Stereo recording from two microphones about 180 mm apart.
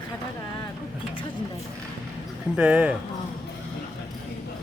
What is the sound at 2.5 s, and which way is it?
Speech, 5° right (ahead or behind).